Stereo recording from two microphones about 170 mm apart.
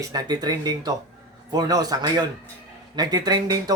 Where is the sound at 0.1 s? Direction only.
25° right (ahead or behind).